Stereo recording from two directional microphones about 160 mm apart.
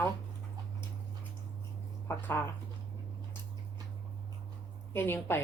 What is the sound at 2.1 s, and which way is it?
Speech, 15° left (ahead or behind).